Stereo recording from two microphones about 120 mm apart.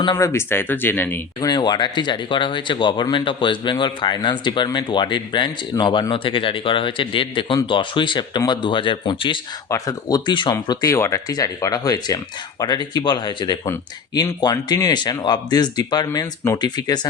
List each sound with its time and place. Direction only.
0.2 s speech: 20° left (ahead or behind)
1.4 s speech: 35° left (ahead or behind)
9.6 s speech: 30° left (ahead or behind)